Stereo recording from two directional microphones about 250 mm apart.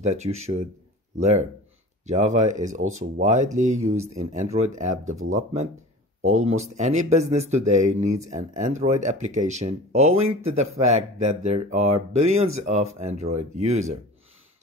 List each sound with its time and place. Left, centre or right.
0.0 s speech: right